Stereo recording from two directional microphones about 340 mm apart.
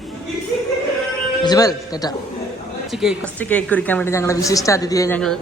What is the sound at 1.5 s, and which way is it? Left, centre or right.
Speech, centre.